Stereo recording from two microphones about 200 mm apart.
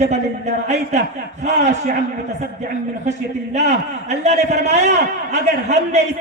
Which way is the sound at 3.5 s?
35° right (ahead or behind).